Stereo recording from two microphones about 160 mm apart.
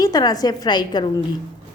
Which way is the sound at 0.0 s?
25° left (ahead or behind).